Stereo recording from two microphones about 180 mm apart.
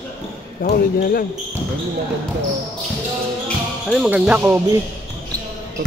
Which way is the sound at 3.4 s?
5° right (ahead or behind).